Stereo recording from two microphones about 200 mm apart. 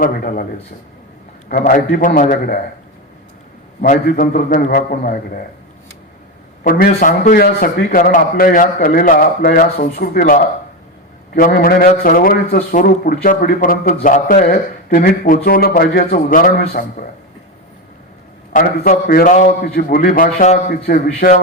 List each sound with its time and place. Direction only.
0.0 s a man's voice: 45° left (ahead or behind)
1.5 s a man's voice: 45° left (ahead or behind)
3.8 s a man's voice: 45° left (ahead or behind)
6.7 s a man's voice: 45° left (ahead or behind)
18.5 s a man's voice: 45° left (ahead or behind)